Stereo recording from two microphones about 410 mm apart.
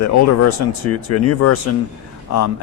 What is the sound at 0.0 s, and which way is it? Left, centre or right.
A man's voice, left.